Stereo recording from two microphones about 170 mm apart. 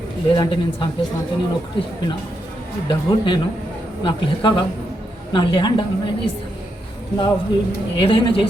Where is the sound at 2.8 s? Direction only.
30° left (ahead or behind).